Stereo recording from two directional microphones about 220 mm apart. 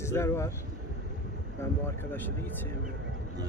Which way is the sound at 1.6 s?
10° left (ahead or behind).